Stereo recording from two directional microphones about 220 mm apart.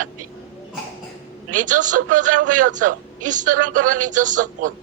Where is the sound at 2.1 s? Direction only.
90° right.